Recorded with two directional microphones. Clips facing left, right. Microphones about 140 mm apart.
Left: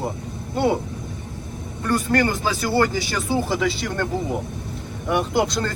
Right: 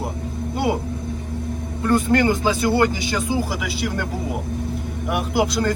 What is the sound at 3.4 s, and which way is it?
Speech, 5° right (ahead or behind).